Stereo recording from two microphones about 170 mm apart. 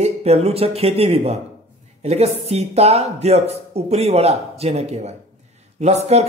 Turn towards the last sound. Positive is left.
turn(degrees=-40)  # may be behind; listen again after turning